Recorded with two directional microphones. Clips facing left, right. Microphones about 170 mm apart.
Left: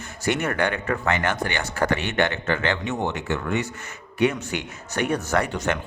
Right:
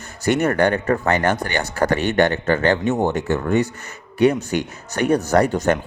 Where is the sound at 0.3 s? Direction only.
40° right (ahead or behind).